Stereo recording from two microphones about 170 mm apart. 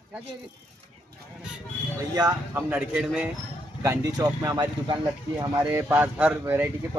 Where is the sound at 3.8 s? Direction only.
15° right (ahead or behind).